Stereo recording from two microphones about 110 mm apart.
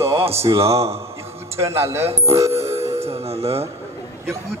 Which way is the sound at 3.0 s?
65° right (ahead or behind).